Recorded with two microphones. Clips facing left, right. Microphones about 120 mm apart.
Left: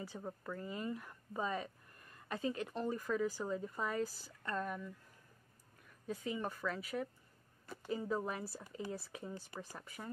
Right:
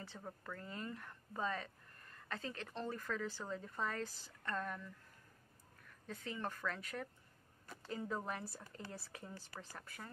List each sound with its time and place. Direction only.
0.0 s speech: 10° left (ahead or behind)
6.0 s speech: 10° left (ahead or behind)